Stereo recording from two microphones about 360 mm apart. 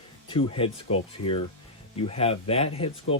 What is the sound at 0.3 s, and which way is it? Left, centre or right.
Speech, centre.